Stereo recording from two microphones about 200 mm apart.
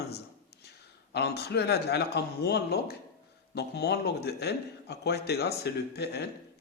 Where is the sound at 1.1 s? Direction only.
55° left (ahead or behind).